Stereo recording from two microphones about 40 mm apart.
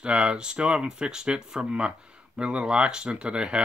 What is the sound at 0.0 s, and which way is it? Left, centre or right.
Speech, right.